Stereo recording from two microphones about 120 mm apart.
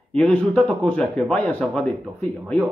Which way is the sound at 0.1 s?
10° left (ahead or behind).